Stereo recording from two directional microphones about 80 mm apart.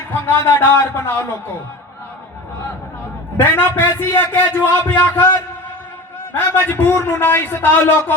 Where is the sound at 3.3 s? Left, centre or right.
Left.